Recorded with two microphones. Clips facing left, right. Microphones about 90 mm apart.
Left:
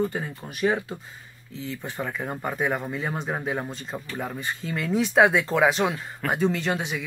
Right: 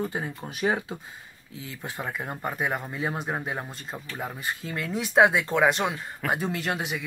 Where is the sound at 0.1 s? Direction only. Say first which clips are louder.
Even; 20° right (ahead or behind).